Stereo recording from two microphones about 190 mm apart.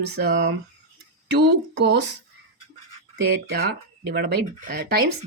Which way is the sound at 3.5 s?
55° right (ahead or behind).